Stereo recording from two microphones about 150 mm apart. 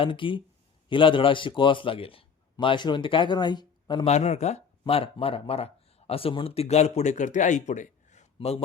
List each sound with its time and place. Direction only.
0.0 s a man's voice: 35° left (ahead or behind)
4.0 s speech: 45° left (ahead or behind)